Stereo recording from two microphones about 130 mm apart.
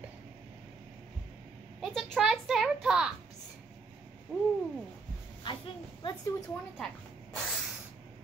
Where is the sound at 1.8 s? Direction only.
Centre (ahead or behind).